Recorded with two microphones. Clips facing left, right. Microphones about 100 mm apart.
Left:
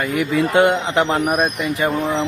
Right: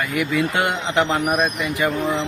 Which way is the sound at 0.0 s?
35° left (ahead or behind).